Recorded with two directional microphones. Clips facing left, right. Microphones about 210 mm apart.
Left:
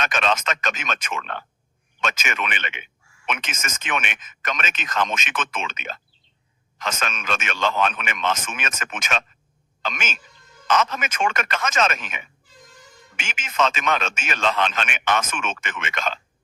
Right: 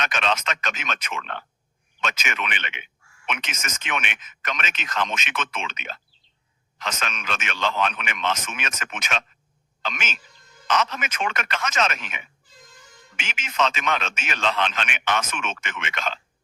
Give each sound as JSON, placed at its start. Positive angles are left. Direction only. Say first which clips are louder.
{"t": 0.0, "sound": "speech", "louder": "left 2 dB", "side_deg": 45}